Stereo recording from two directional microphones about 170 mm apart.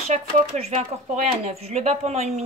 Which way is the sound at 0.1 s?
40° right (ahead or behind).